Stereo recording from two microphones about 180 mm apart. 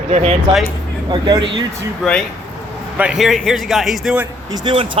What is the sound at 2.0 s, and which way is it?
Speech, centre (ahead or behind).